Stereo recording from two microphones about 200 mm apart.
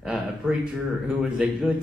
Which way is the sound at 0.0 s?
5° right (ahead or behind).